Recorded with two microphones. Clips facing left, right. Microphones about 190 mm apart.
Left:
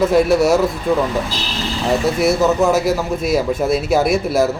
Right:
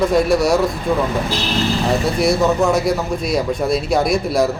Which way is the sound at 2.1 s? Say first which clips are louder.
Even; 5° left (ahead or behind).